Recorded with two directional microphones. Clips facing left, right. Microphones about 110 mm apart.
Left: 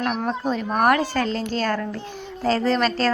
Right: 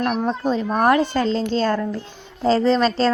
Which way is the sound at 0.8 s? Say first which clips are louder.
Right 1 dB; 25° right (ahead or behind).